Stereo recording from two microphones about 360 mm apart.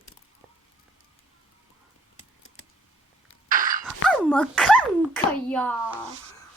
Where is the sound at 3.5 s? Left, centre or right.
Right.